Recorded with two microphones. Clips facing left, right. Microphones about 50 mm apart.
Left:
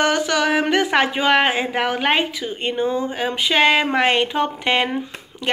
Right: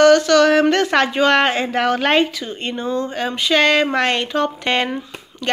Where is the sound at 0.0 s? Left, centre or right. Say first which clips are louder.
Right 7 dB; centre.